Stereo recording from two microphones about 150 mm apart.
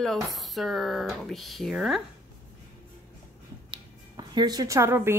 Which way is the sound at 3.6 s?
30° right (ahead or behind).